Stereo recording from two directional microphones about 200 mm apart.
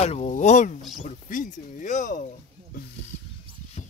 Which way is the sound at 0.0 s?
35° left (ahead or behind).